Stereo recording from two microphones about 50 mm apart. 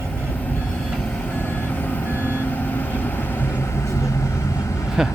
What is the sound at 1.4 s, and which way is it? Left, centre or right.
Reversing beeps, left.